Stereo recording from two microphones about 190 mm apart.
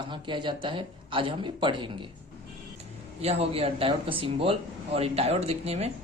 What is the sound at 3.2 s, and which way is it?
Speech, 30° right (ahead or behind).